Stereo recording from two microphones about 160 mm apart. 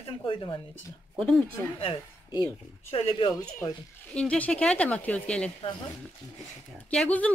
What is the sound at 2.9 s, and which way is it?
Speech, 40° left (ahead or behind).